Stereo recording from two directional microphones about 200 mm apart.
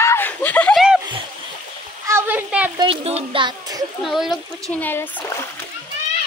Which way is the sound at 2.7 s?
25° right (ahead or behind).